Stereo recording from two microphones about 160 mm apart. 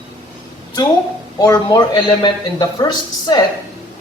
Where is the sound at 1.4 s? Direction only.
25° left (ahead or behind).